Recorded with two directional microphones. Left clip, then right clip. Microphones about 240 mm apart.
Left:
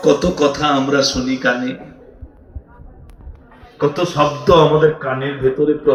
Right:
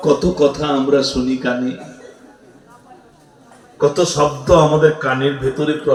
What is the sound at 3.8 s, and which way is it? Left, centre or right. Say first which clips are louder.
Mantra: right 1 dB; left.